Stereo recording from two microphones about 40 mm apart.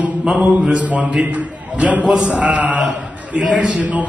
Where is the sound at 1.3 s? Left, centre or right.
Right.